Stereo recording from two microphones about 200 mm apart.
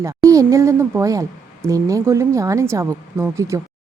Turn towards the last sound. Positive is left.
turn(degrees=-15)  # may be behind; listen again after turning